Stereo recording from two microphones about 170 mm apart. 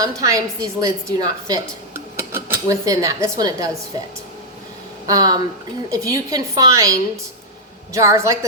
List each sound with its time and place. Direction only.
0.0 s speech: 20° right (ahead or behind)
5.0 s speech: 20° right (ahead or behind)
7.9 s a woman's voice: 15° right (ahead or behind)